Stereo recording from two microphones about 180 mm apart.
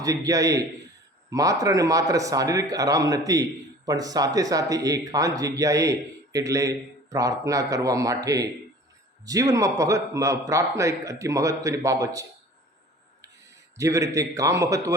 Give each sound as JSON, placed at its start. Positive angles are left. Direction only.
{"t": 0.0, "sound": "a man's voice", "side_deg": -20}
{"t": 13.7, "sound": "a man's voice", "side_deg": -15}